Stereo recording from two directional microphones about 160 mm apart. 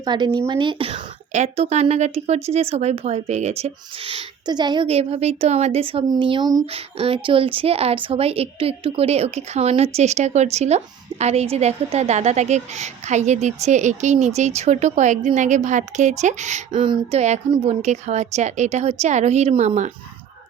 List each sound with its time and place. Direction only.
0.0 s a woman's voice: 25° right (ahead or behind); by 16.8 s 45° right (ahead or behind)
16.8 s a woman's voice: 35° right (ahead or behind)